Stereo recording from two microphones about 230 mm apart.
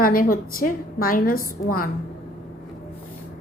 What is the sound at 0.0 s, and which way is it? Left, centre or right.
A woman's voice, left.